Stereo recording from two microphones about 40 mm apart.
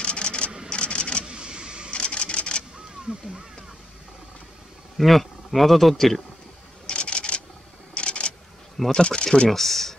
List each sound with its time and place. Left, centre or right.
0.0 s a sound: left
1.2 s vehicle: right
1.9 s printer: left
3.1 s speech: centre
4.9 s speech: centre
6.9 s a sound: left
8.9 s speech: left
9.5 s speech: centre